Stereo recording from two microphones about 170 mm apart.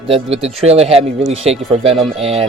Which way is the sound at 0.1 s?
35° right (ahead or behind).